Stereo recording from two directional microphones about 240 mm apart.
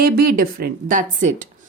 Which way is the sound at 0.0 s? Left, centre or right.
Right.